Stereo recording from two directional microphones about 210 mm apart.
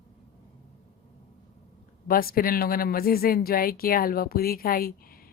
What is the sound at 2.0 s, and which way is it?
Speech, 45° left (ahead or behind).